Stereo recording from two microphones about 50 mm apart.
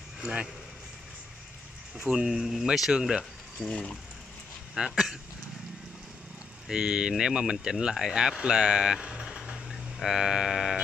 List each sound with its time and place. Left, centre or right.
2.1 s speech: centre
2.9 s speech: centre
3.6 s speech: left
4.7 s speech: centre
6.7 s speech: centre